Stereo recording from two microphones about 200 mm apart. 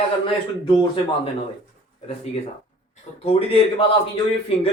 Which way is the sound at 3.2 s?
30° left (ahead or behind).